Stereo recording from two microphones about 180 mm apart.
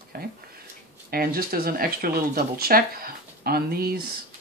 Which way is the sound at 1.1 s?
55° right (ahead or behind).